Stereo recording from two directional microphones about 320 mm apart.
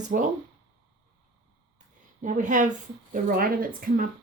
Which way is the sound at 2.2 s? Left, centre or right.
Right.